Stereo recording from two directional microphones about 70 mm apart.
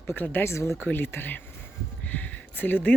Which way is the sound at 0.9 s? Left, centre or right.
Left.